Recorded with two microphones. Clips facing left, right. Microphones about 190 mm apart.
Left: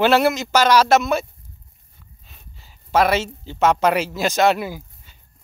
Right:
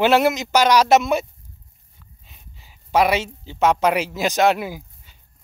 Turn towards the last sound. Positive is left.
turn(degrees=-10)  # may be behind; listen again after turning